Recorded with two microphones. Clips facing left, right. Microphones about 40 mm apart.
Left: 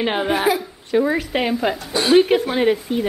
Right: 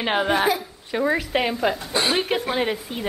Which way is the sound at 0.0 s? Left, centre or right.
Centre.